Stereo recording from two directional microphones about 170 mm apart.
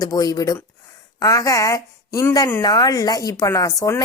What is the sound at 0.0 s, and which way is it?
A woman's voice, 20° left (ahead or behind).